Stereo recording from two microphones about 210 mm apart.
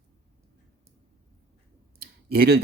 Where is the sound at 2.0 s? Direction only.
50° right (ahead or behind).